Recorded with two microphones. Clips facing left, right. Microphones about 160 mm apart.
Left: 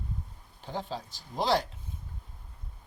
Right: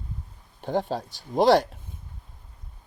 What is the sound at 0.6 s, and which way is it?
Speech, 60° right (ahead or behind).